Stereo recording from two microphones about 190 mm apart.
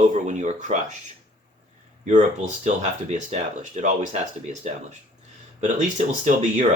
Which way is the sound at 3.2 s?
40° right (ahead or behind).